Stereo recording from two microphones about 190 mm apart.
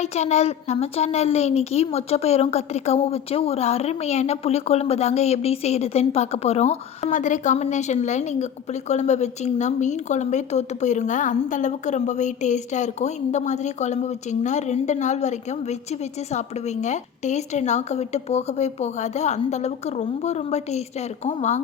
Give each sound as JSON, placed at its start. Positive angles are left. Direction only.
{"t": 0.0, "sound": "a woman's voice", "side_deg": 35}